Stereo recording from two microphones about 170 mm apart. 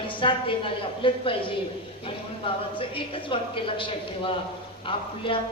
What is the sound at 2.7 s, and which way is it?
A woman's voice, 30° left (ahead or behind).